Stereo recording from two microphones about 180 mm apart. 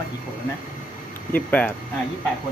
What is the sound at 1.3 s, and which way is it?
Speech, 10° left (ahead or behind).